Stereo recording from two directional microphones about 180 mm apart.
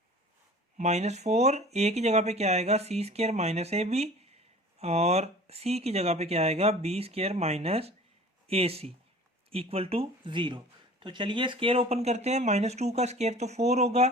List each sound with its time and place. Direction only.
0.8 s speech: 40° right (ahead or behind)